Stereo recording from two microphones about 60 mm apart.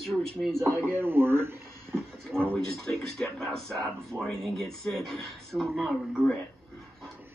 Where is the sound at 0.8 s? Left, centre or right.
Right.